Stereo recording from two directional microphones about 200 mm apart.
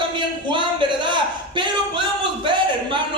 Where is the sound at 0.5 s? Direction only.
25° right (ahead or behind).